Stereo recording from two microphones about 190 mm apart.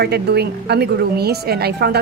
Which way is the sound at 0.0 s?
60° right (ahead or behind).